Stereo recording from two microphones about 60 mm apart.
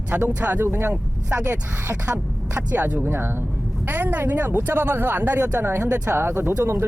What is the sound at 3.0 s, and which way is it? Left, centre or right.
Speech, right.